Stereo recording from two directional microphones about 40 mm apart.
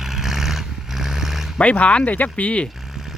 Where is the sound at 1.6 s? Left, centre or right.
Left.